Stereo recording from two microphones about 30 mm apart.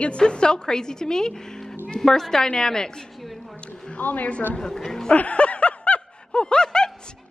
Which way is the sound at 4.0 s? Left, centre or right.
Left.